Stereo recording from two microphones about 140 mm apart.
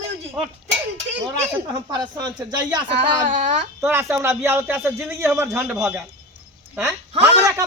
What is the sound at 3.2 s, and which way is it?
Speech, 65° right (ahead or behind).